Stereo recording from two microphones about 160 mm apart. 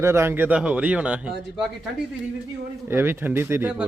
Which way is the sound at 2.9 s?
15° right (ahead or behind).